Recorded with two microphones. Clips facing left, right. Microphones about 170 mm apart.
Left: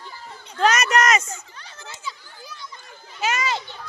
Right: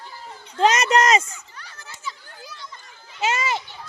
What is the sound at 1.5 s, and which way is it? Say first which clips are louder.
Children playing: left 2 dB; 25° left (ahead or behind).